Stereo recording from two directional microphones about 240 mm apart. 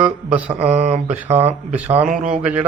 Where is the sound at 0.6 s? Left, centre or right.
Right.